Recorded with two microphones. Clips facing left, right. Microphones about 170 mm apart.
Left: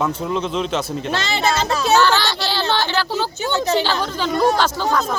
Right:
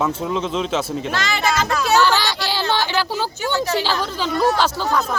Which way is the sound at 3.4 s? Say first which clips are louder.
Even; 25° left (ahead or behind).